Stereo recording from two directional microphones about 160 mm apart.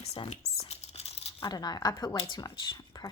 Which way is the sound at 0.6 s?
40° left (ahead or behind).